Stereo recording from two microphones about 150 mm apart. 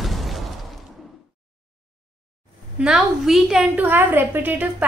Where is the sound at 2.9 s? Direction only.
5° right (ahead or behind).